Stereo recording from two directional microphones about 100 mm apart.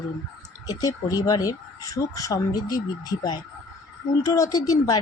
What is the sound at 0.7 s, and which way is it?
Speech, 40° left (ahead or behind).